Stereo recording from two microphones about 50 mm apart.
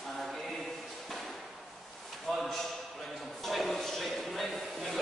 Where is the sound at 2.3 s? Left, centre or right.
Centre.